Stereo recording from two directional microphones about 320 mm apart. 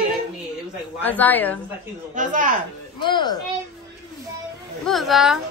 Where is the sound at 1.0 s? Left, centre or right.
Centre.